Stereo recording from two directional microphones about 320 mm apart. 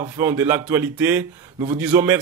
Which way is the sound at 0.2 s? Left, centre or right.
Centre.